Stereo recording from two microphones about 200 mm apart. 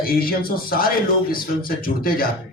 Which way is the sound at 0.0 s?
50° left (ahead or behind).